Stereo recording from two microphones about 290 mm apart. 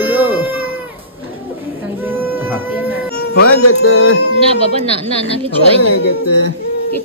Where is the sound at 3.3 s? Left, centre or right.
Left.